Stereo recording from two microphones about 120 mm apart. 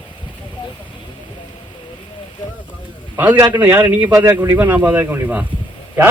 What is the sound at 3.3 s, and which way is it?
Speech, 35° right (ahead or behind).